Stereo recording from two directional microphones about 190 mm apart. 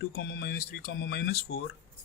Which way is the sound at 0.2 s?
55° left (ahead or behind).